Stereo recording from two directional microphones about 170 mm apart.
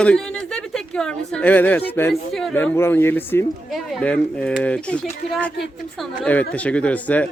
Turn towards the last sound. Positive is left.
turn(degrees=10)  # may be behind; listen again after turning